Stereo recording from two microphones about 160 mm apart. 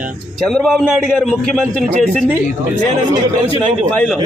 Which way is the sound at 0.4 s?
Centre (ahead or behind).